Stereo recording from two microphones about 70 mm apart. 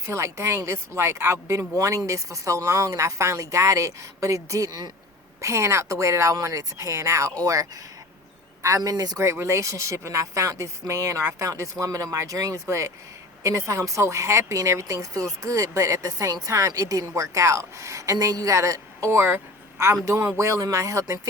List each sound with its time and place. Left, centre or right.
0.0 s a woman's voice: right